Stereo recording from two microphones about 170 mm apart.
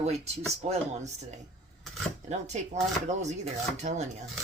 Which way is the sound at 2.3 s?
45° right (ahead or behind).